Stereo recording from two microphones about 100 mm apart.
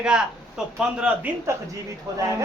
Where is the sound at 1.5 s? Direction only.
30° right (ahead or behind).